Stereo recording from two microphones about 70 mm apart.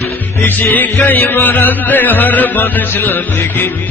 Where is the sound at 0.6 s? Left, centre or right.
Left.